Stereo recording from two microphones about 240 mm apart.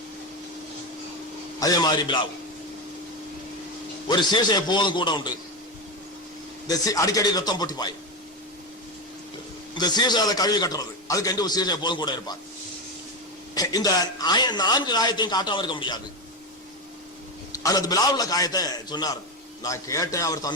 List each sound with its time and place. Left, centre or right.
1.5 s a man's voice: centre
4.1 s a man's voice: centre
6.7 s a man's voice: centre
9.7 s a man's voice: centre
13.5 s a man's voice: centre
17.5 s a man's voice: centre